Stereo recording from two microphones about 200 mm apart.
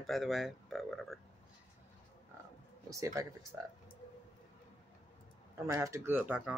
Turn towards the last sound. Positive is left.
turn(degrees=-5)  # may be behind; listen again after turning